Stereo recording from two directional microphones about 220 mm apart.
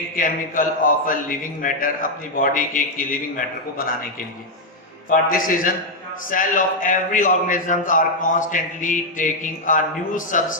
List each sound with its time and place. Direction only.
0.2 s a man's voice: 40° left (ahead or behind)
5.0 s a man's voice: 40° left (ahead or behind)